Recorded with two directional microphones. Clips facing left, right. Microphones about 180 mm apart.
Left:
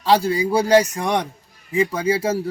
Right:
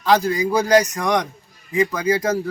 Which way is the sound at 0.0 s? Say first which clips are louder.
Even; 30° left (ahead or behind).